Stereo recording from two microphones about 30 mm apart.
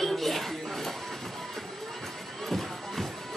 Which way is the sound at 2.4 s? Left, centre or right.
Centre.